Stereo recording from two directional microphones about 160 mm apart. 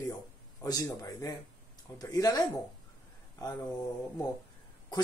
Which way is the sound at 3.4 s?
25° left (ahead or behind).